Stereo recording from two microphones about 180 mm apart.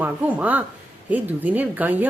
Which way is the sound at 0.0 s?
10° right (ahead or behind).